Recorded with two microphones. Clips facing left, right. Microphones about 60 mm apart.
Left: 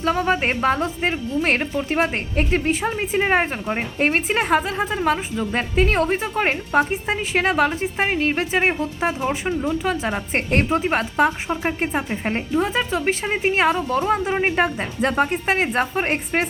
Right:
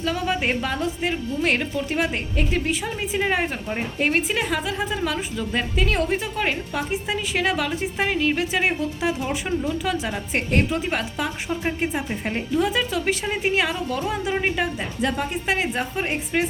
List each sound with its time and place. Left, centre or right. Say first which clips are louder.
0.0 s a woman's voice: left 4 dB; left
4.0 s a woman's voice: left 2 dB; left